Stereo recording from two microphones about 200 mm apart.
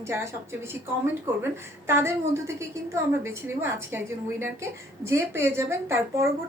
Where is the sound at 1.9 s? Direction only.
15° right (ahead or behind).